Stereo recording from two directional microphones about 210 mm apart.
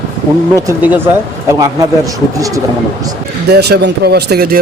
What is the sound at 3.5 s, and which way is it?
Speech, 50° right (ahead or behind).